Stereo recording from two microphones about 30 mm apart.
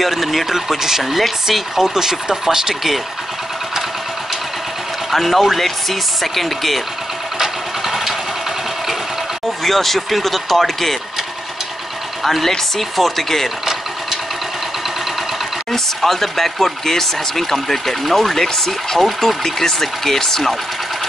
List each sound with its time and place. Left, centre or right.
0.0 s speech: centre
2.0 s speech: centre
5.1 s speech: centre
7.3 s vehicle: centre
9.6 s speech: centre
12.2 s speech: centre
15.7 s speech: centre